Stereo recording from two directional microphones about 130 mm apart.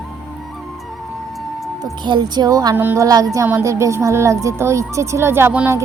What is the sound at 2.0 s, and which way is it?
Speech, 35° right (ahead or behind).